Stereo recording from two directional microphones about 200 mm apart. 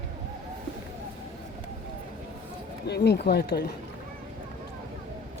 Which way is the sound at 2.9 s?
55° left (ahead or behind).